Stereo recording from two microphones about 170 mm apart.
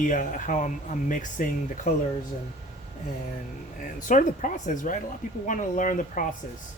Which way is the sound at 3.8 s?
50° left (ahead or behind).